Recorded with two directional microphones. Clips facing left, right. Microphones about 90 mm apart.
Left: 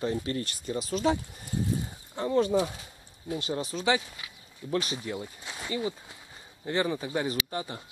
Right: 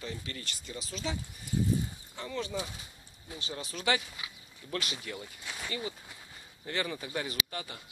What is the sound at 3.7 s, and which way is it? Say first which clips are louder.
Speech: left 2 dB; 20° left (ahead or behind).